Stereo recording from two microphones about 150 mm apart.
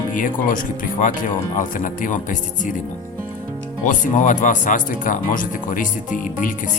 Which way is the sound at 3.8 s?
60° left (ahead or behind).